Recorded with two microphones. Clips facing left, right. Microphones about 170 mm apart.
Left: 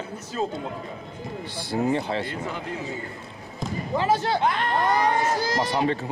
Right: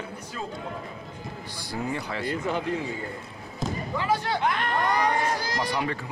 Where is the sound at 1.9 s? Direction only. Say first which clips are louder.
Left 4 dB; 25° left (ahead or behind).